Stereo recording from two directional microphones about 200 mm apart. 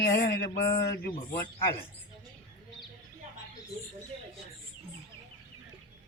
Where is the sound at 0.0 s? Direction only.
55° left (ahead or behind).